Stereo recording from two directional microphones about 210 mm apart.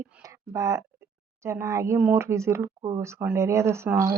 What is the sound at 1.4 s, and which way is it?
Speech, 15° right (ahead or behind).